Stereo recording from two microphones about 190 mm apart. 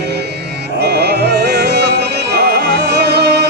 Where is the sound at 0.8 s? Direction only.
60° right (ahead or behind).